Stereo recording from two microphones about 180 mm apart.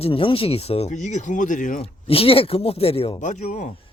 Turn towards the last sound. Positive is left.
turn(degrees=40)  # may be behind; listen again after turning